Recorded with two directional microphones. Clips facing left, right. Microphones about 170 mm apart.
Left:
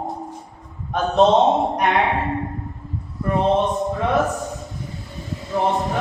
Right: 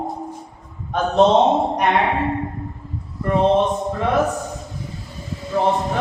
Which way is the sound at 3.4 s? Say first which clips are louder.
Right 2 dB; centre (ahead or behind).